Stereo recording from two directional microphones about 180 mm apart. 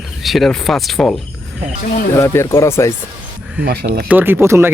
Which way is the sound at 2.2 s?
15° left (ahead or behind).